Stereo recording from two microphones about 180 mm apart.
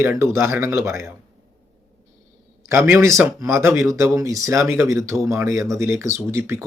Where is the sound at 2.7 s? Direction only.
10° right (ahead or behind).